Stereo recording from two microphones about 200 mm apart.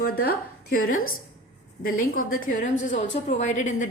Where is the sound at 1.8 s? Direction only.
45° left (ahead or behind).